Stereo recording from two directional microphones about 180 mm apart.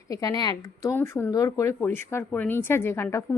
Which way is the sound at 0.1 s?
20° left (ahead or behind).